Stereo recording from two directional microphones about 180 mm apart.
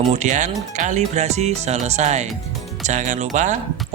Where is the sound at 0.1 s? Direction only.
40° right (ahead or behind).